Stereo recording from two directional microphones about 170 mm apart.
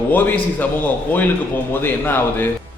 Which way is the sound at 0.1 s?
10° left (ahead or behind).